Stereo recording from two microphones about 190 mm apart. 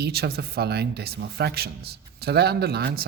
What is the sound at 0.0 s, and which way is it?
Speech, 55° right (ahead or behind).